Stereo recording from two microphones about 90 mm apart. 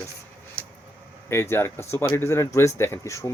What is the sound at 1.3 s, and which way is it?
Speech, 30° left (ahead or behind).